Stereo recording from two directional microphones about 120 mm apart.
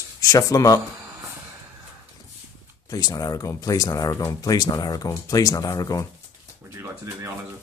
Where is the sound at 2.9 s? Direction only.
30° left (ahead or behind).